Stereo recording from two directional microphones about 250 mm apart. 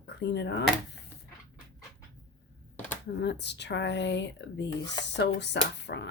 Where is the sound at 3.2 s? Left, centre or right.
Left.